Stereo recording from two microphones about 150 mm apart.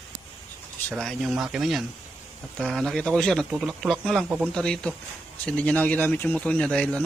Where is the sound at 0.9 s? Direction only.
Centre (ahead or behind).